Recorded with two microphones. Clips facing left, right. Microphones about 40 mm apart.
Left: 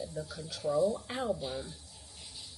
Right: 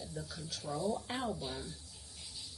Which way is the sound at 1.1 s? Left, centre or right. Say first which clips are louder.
Left 4 dB; centre.